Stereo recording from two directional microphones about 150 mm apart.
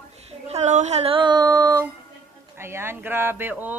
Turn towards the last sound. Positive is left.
turn(degrees=-10)  # may be behind; listen again after turning